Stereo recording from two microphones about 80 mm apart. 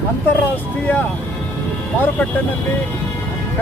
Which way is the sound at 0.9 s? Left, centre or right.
Left.